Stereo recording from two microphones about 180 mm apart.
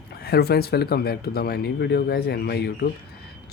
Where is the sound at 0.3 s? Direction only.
60° left (ahead or behind).